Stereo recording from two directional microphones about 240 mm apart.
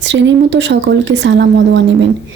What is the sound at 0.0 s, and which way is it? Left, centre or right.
Speech, right.